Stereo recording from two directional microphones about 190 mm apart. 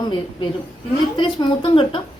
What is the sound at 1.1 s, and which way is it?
Speech, 25° left (ahead or behind).